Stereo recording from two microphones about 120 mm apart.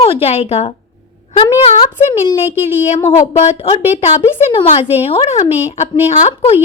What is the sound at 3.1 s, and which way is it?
A woman's voice, 60° left (ahead or behind).